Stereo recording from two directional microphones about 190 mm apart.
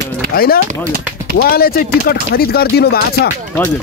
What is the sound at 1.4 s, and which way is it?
Speech, 55° left (ahead or behind).